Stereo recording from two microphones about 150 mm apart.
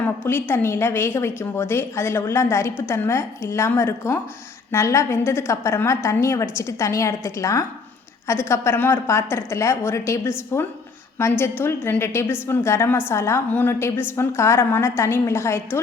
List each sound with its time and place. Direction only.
0.0 s a woman's voice: 15° left (ahead or behind)